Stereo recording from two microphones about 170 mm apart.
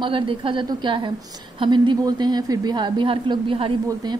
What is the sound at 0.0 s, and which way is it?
A woman's voice, 30° right (ahead or behind).